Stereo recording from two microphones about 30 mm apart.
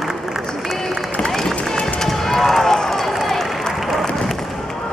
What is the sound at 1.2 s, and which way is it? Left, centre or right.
Run, centre.